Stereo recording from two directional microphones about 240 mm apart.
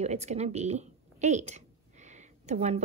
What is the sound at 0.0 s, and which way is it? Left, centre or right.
A woman's voice, right.